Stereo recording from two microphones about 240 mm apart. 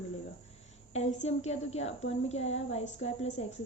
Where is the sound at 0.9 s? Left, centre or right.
Left.